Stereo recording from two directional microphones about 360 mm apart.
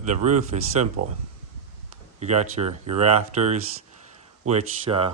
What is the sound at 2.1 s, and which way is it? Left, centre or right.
Speech, centre.